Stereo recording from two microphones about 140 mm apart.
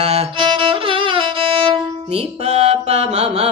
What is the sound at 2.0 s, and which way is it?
Music, 50° right (ahead or behind).